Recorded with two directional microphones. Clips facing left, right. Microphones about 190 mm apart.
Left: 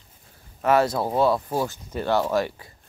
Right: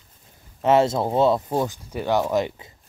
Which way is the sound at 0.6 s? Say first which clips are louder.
Right 2 dB; 25° right (ahead or behind).